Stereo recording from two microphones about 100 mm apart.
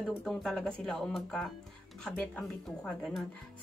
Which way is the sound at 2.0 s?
15° left (ahead or behind).